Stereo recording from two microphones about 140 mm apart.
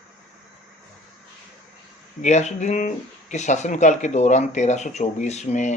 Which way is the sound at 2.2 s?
55° left (ahead or behind).